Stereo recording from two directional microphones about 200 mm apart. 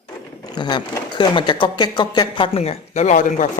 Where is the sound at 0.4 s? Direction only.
20° left (ahead or behind).